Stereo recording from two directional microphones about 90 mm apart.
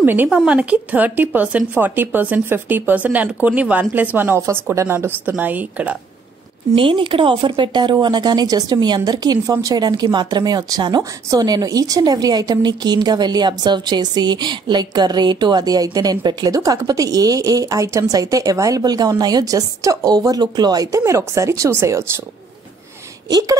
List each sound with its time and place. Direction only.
0.0 s speech: 20° right (ahead or behind)
6.7 s speech: 75° right (ahead or behind); by 21.0 s 45° right (ahead or behind)
21.0 s speech: 30° right (ahead or behind)
23.3 s speech: 40° right (ahead or behind)